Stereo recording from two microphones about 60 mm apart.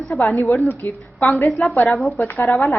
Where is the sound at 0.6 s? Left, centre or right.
Left.